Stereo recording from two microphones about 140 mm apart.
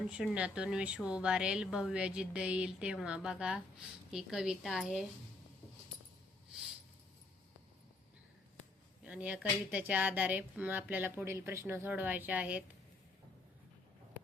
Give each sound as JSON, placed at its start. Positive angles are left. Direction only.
{"t": 0.1, "sound": "a woman's voice", "side_deg": -10}
{"t": 9.0, "sound": "speech", "side_deg": -10}